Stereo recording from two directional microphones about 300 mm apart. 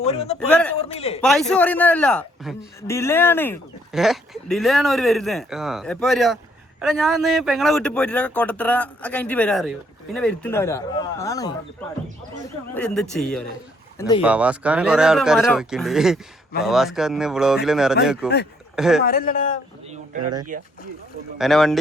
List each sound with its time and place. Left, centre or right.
0.0 s a man's voice: centre
0.3 s a man's voice: centre
0.8 s a man's voice: centre
1.2 s a man's voice: centre
12.7 s a man's voice: centre
19.0 s a man's voice: left
19.9 s a sound: right
20.5 s speech: right
21.3 s a man's voice: centre